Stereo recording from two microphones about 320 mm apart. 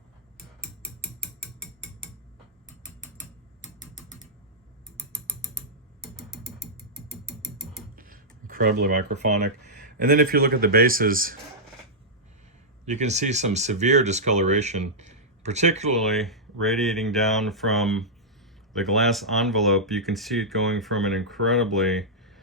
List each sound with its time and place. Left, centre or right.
7.9 s typing: right
10.0 s speech: right
12.8 s speech: right
16.0 s speech: centre